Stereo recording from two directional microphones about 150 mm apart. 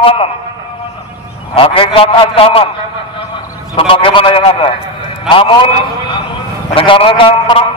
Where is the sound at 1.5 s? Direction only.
35° left (ahead or behind).